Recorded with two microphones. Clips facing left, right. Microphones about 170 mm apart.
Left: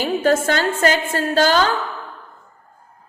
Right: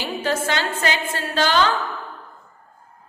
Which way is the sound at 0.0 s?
45° left (ahead or behind).